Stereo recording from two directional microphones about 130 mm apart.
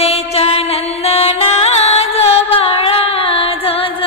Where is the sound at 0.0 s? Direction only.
50° left (ahead or behind).